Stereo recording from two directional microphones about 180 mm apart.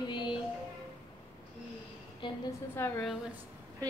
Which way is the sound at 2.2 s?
25° left (ahead or behind).